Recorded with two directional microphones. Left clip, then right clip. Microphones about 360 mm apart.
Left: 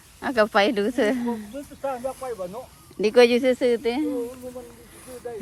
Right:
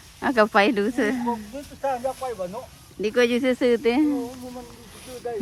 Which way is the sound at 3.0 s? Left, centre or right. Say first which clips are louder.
Left 4 dB; centre.